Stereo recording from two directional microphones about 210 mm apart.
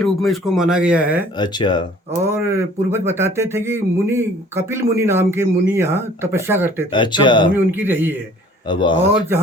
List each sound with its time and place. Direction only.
0.0 s speech: centre (ahead or behind)
1.4 s speech: 20° left (ahead or behind)
2.2 s speech: 10° right (ahead or behind)
6.9 s speech: 20° left (ahead or behind)
7.5 s speech: 10° right (ahead or behind)
8.6 s speech: 20° left (ahead or behind)